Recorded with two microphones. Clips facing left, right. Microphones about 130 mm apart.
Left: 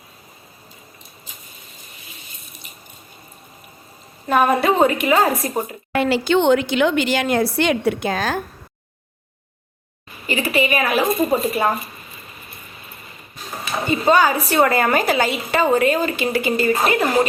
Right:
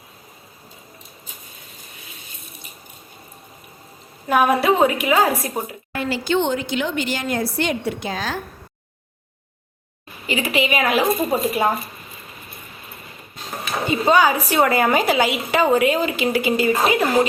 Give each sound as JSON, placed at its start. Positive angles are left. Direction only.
{"t": 4.3, "sound": "a woman's voice", "side_deg": -10}
{"t": 5.9, "sound": "a woman's voice", "side_deg": 75}
{"t": 10.2, "sound": "a woman's voice", "side_deg": -15}
{"t": 13.9, "sound": "a woman's voice", "side_deg": -10}